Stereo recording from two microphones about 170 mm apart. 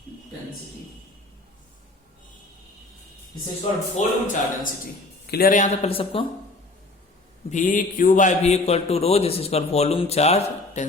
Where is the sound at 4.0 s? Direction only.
40° left (ahead or behind).